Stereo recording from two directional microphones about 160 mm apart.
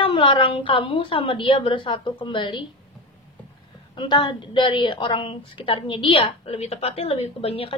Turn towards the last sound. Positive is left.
turn(degrees=35)  # may be behind; listen again after turning